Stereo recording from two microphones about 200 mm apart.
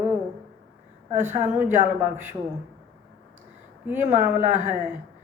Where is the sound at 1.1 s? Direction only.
35° right (ahead or behind).